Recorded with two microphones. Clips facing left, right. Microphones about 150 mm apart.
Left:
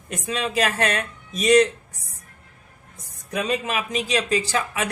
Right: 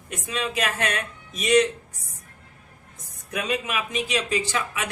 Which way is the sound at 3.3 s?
35° left (ahead or behind).